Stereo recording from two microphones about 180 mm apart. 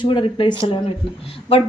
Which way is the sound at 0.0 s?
25° left (ahead or behind).